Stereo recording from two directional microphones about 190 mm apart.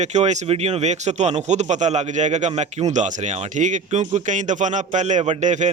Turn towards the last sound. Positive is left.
turn(degrees=-40)  # may be behind; listen again after turning